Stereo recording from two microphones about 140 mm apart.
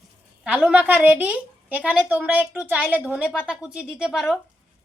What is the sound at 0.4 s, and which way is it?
A woman's voice, 10° right (ahead or behind).